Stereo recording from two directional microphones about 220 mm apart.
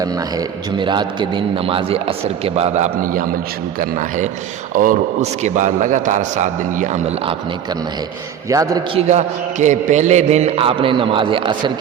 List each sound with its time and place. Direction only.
0.0 s a man's voice: 15° right (ahead or behind); by 7.3 s 35° right (ahead or behind)
8.4 s a man's voice: 15° right (ahead or behind)
9.0 s a man's voice: 30° right (ahead or behind)